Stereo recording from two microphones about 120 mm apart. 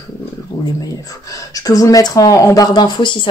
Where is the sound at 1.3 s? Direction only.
30° left (ahead or behind).